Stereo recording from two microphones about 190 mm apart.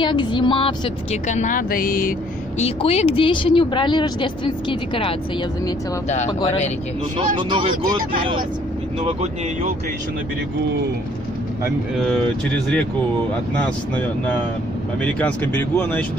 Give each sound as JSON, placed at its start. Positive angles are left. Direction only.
{"t": 0.0, "sound": "speech", "side_deg": 25}
{"t": 1.2, "sound": "speech", "side_deg": 40}
{"t": 2.6, "sound": "speech", "side_deg": 35}
{"t": 7.2, "sound": "speech", "side_deg": -25}
{"t": 9.0, "sound": "speech", "side_deg": -35}
{"t": 13.6, "sound": "speech", "side_deg": 5}